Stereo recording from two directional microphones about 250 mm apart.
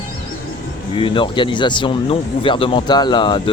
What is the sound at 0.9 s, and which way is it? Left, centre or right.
Speech, centre.